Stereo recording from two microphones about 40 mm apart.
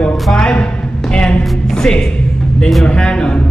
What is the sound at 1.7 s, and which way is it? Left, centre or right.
Speech, centre.